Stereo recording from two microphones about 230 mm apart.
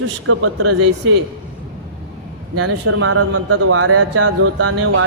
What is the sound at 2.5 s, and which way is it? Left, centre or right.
Speech, right.